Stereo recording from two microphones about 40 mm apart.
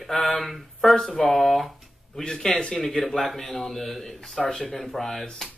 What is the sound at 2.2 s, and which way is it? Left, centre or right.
Speech, centre.